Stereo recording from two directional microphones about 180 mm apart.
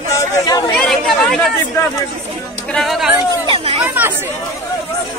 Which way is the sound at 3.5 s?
35° right (ahead or behind).